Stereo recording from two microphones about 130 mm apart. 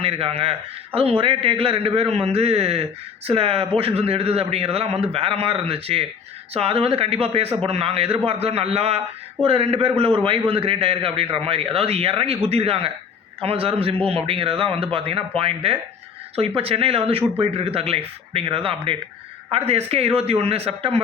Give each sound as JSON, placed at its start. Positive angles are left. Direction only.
{"t": 0.0, "sound": "a man's voice", "side_deg": -45}